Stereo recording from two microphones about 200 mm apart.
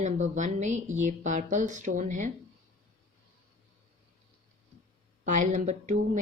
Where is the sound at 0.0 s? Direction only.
35° right (ahead or behind).